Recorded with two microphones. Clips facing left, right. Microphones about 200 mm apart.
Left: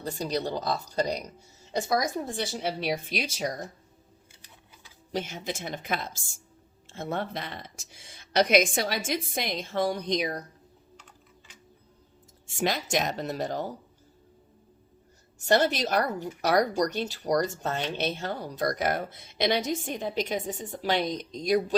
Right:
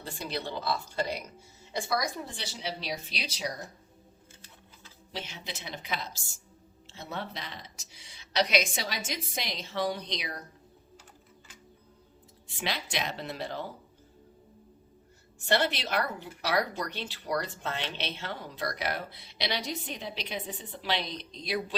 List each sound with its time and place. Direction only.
0.0 s a woman's voice: 40° left (ahead or behind)
5.1 s a woman's voice: 45° left (ahead or behind)
12.5 s a woman's voice: 45° left (ahead or behind)
15.4 s a woman's voice: 40° left (ahead or behind)